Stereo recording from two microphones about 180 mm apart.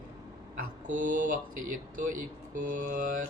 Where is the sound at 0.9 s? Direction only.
45° right (ahead or behind).